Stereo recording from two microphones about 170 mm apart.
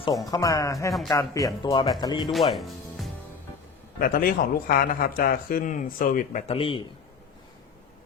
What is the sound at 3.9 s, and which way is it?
Speech, 60° left (ahead or behind).